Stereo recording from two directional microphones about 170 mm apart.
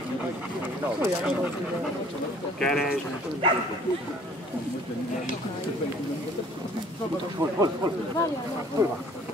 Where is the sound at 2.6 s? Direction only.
Centre (ahead or behind).